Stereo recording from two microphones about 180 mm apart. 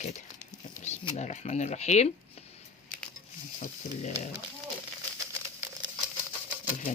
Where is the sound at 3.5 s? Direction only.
40° left (ahead or behind).